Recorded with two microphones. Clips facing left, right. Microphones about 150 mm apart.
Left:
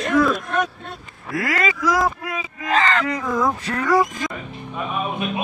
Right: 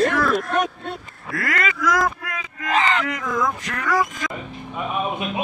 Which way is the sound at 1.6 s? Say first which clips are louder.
Left 1 dB; 30° left (ahead or behind).